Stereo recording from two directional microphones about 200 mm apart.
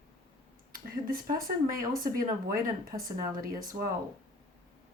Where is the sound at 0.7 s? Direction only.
45° right (ahead or behind).